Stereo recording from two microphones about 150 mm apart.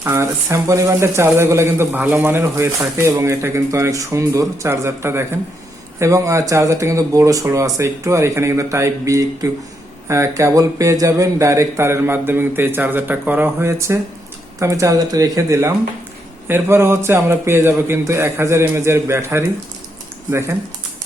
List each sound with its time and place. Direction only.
0.0 s speech: 20° right (ahead or behind)